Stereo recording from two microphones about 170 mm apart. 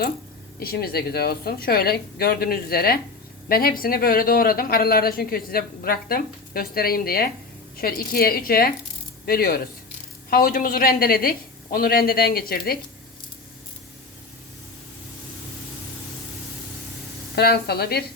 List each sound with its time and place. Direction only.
0.6 s a woman's voice: 65° left (ahead or behind)
17.3 s speech: 70° left (ahead or behind)